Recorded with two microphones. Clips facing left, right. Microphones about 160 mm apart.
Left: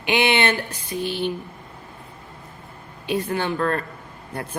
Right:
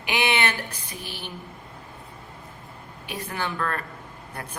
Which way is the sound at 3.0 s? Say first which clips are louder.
Left 8 dB; 25° left (ahead or behind).